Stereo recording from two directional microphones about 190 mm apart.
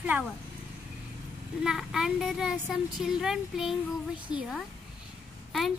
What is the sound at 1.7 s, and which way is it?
A woman's voice, centre (ahead or behind).